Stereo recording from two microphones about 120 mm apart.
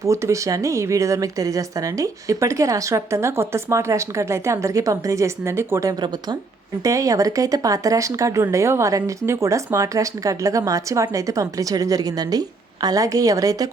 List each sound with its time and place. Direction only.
0.0 s speech: 25° right (ahead or behind)